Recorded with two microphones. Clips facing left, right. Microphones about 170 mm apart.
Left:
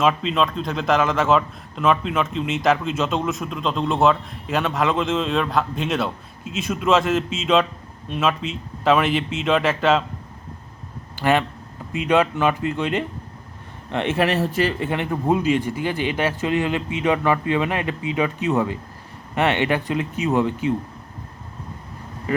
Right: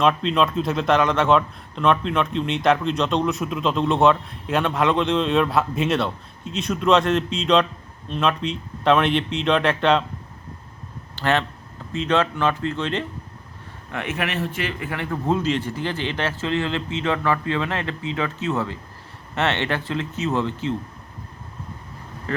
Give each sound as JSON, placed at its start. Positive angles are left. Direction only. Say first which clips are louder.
{"t": 0.0, "sound": "a man's voice", "louder": "even", "side_deg": 5}
{"t": 11.1, "sound": "a man's voice", "louder": "left 2 dB", "side_deg": 10}
{"t": 13.9, "sound": "speech", "louder": "left 6 dB", "side_deg": 30}
{"t": 14.8, "sound": "a man's voice", "louder": "left 3 dB", "side_deg": 20}
{"t": 22.3, "sound": "speech", "louder": "left 4 dB", "side_deg": 10}